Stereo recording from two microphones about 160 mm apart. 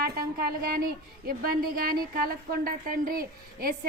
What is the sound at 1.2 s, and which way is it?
A woman's voice, 65° right (ahead or behind).